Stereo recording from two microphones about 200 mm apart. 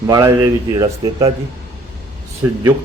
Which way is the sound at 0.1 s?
15° right (ahead or behind).